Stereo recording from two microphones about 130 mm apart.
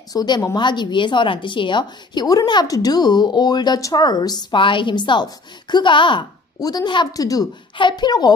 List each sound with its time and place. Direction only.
0.1 s speech: 30° left (ahead or behind)